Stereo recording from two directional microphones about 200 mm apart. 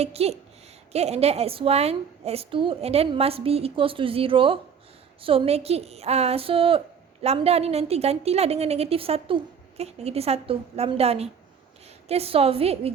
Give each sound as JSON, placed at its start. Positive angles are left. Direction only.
{"t": 0.0, "sound": "a woman's voice", "side_deg": -30}